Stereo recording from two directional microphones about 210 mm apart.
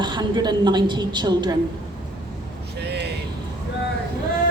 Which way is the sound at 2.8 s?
50° right (ahead or behind).